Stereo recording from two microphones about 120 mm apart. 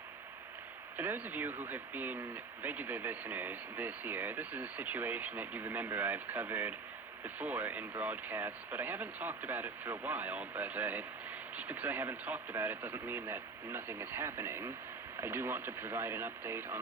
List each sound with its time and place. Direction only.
0.9 s speech: 15° right (ahead or behind)